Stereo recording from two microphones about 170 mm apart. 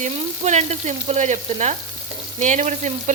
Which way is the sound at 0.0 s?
45° right (ahead or behind).